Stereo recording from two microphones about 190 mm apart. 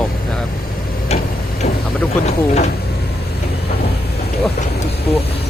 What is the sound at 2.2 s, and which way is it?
Speech, 35° left (ahead or behind).